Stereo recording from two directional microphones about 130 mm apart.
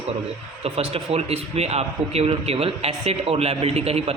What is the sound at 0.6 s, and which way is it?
A man's voice, 50° right (ahead or behind).